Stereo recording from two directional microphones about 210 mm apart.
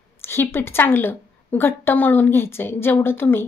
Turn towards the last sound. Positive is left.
turn(degrees=10)  # may be behind; listen again after turning